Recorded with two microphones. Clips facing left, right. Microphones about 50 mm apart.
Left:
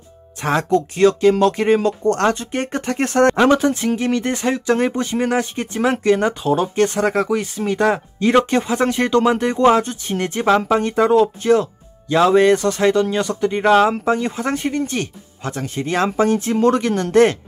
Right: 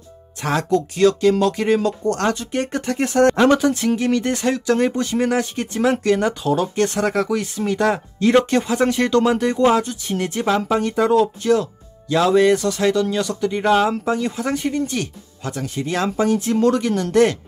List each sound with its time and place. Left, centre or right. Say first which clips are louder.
0.4 s speech: left 2 dB; left
3.3 s speech: even; left
9.7 s speech: left 3 dB; left